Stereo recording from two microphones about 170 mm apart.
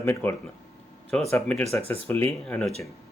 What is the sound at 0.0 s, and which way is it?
Speech, 15° left (ahead or behind).